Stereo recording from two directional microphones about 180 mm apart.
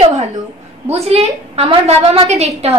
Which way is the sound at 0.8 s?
35° right (ahead or behind).